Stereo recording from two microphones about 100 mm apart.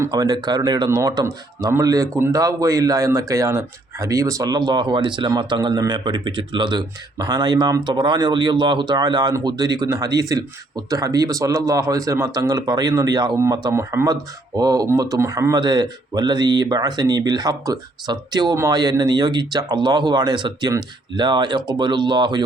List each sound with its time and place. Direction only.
0.1 s speech: 40° right (ahead or behind)
13.3 s speech: 30° right (ahead or behind); by 22.4 s 50° right (ahead or behind)